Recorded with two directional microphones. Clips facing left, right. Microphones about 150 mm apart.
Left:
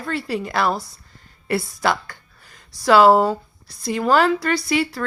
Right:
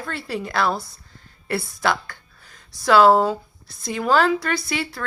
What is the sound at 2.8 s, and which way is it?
Speech, 5° left (ahead or behind).